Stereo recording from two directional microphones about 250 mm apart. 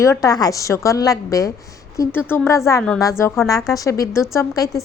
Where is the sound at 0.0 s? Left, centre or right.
Centre.